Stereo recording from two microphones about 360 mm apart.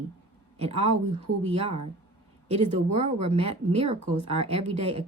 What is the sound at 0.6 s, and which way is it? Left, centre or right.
Speech, centre.